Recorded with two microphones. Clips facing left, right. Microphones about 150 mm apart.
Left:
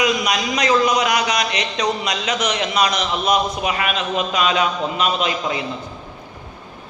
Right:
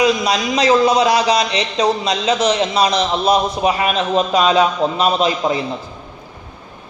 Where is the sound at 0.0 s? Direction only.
30° right (ahead or behind).